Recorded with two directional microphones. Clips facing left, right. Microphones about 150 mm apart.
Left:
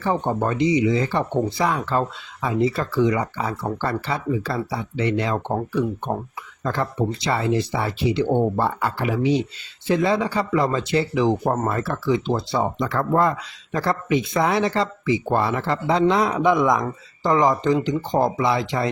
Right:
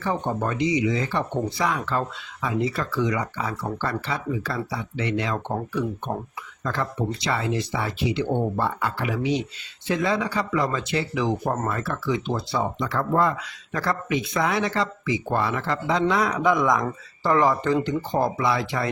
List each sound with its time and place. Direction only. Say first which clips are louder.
0.0 s speech: left 3 dB; 30° left (ahead or behind)
7.3 s speech: left 4 dB; 35° left (ahead or behind)
12.8 s speech: left 2 dB; 50° left (ahead or behind)
13.7 s speech: left 4 dB; 25° left (ahead or behind)